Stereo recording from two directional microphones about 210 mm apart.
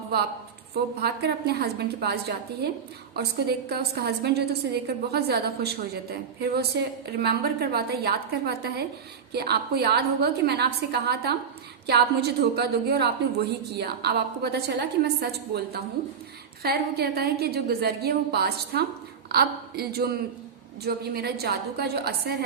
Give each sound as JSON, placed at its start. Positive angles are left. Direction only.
{"t": 0.7, "sound": "a woman's voice", "side_deg": -50}